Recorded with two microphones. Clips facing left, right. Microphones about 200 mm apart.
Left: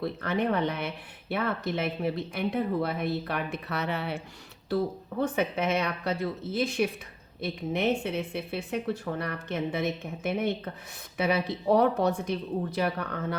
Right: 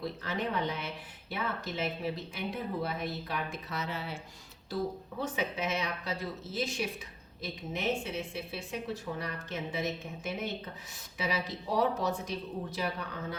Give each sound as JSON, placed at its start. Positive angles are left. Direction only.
{"t": 0.0, "sound": "speech", "side_deg": 60}
{"t": 5.2, "sound": "speech", "side_deg": 55}